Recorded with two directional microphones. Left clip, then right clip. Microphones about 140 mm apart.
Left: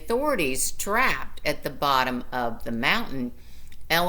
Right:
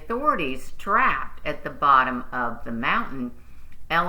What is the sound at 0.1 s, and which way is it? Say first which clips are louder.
Speech: right 1 dB; 35° left (ahead or behind).